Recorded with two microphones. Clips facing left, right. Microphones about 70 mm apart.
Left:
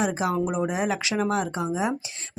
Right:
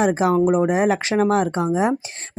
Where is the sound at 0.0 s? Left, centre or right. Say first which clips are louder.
Right 8 dB; right.